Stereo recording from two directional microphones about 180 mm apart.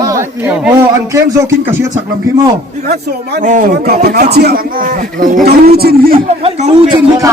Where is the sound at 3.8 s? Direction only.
60° right (ahead or behind).